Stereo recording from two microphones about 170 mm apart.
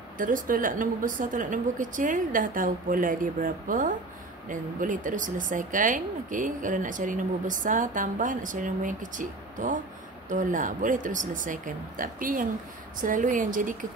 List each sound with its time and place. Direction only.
0.2 s speech: 55° right (ahead or behind)